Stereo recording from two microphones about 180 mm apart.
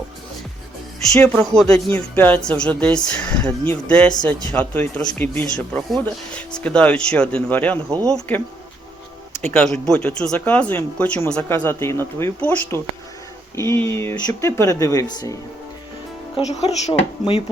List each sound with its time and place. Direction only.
1.1 s speech: 5° left (ahead or behind)
7.9 s speech: 20° right (ahead or behind)
9.3 s speech: 10° left (ahead or behind)
16.5 s speech: 35° left (ahead or behind)